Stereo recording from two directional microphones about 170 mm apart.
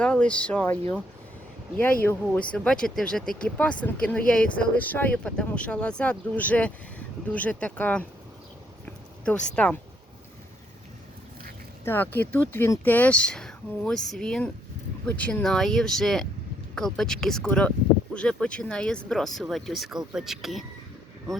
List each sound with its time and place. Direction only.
0.0 s speech: 5° left (ahead or behind)
2.5 s speech: 5° left (ahead or behind)
9.2 s speech: 5° left (ahead or behind)
11.9 s speech: 10° left (ahead or behind)